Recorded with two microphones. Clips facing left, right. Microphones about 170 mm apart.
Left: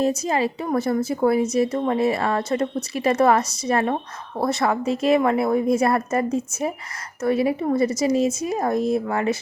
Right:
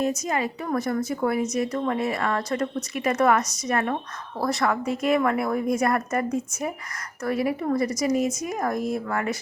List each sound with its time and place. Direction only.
0.0 s a woman's voice: 30° left (ahead or behind)